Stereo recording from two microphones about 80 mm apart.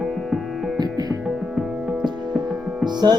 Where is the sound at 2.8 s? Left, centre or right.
Right.